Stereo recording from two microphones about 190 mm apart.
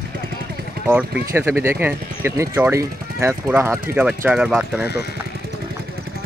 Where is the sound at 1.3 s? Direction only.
10° right (ahead or behind).